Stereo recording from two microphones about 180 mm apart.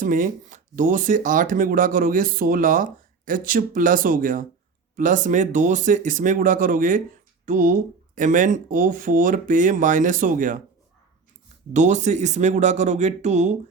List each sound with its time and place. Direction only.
0.0 s speech: 50° right (ahead or behind)
11.7 s speech: 40° right (ahead or behind)